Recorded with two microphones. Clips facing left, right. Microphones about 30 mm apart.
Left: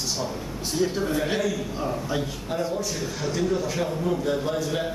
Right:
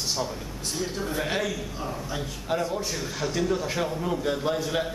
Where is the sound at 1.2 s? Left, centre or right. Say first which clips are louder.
Even; centre.